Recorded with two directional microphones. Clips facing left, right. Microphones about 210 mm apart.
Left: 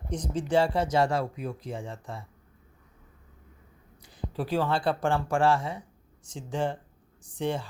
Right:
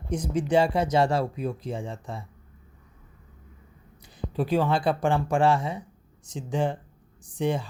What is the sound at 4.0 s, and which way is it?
Speech, 20° right (ahead or behind).